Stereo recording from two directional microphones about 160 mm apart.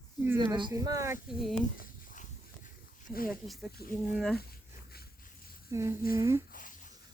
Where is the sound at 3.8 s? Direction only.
75° left (ahead or behind).